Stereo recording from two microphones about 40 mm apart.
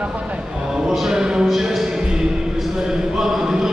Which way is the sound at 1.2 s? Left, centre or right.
Centre.